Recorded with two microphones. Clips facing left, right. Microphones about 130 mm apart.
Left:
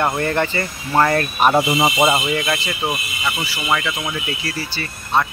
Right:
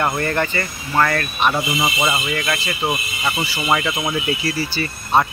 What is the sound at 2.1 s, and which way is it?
Speech, 15° left (ahead or behind).